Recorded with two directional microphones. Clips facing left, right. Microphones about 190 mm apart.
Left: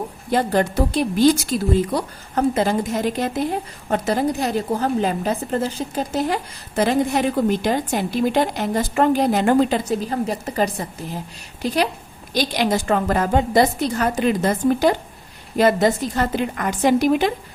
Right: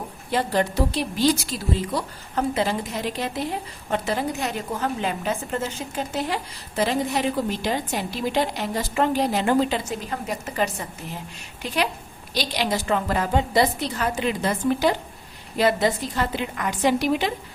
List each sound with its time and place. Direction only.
0.3 s a woman's voice: 45° left (ahead or behind)